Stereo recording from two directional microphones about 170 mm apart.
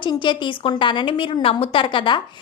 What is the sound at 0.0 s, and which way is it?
A woman's voice, 25° left (ahead or behind).